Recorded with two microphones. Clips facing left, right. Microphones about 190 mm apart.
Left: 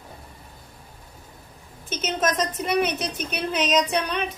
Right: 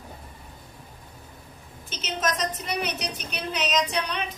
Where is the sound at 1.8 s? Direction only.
50° left (ahead or behind).